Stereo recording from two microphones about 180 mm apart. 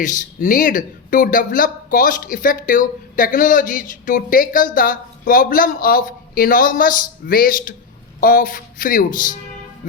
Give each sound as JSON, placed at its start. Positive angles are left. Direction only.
{"t": 0.0, "sound": "speech", "side_deg": 45}